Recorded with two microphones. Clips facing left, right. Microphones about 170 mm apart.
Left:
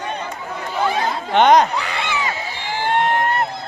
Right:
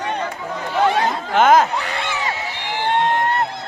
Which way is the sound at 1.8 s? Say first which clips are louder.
Left 1 dB; 45° right (ahead or behind).